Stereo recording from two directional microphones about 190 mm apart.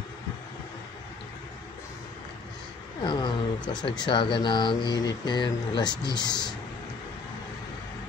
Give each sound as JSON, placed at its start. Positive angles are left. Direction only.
{"t": 3.0, "sound": "speech", "side_deg": 25}